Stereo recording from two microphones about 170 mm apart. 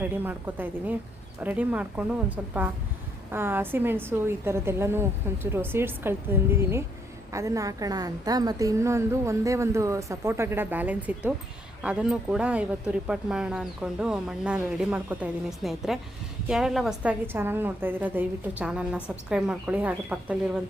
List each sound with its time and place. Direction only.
0.0 s a woman's voice: 10° right (ahead or behind)